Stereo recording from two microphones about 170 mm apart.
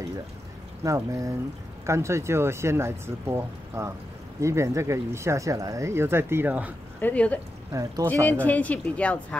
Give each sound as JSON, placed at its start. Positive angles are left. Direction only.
{"t": 0.8, "sound": "speech", "side_deg": -20}
{"t": 7.0, "sound": "speech", "side_deg": 10}
{"t": 7.7, "sound": "speech", "side_deg": -20}
{"t": 8.1, "sound": "speech", "side_deg": 10}